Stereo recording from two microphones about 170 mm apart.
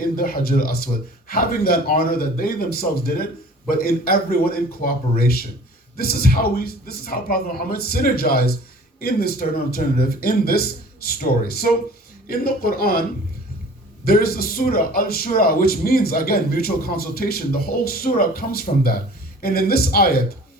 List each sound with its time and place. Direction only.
0.0 s a man's voice: 60° left (ahead or behind)